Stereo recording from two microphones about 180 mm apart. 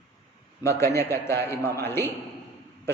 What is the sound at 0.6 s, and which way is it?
A man's voice, 15° left (ahead or behind).